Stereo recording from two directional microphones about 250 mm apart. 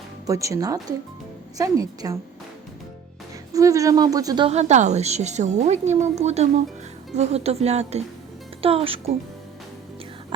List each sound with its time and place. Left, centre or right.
0.3 s speech: centre
3.5 s a woman's voice: centre